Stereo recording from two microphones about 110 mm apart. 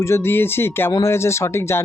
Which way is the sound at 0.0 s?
25° left (ahead or behind).